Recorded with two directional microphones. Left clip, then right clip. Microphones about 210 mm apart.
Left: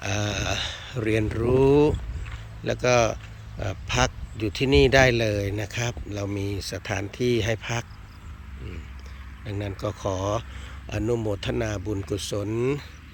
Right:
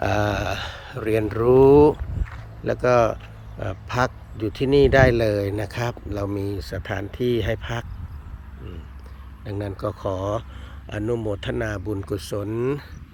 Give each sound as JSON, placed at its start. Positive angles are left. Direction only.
{"t": 0.0, "sound": "a sound", "side_deg": -5}
{"t": 2.6, "sound": "speech", "side_deg": 0}
{"t": 4.4, "sound": "speech", "side_deg": 15}
{"t": 5.1, "sound": "speech", "side_deg": 0}
{"t": 6.6, "sound": "speech", "side_deg": 15}
{"t": 9.4, "sound": "speech", "side_deg": 0}
{"t": 10.0, "sound": "speech", "side_deg": 15}
{"t": 10.8, "sound": "speech", "side_deg": 5}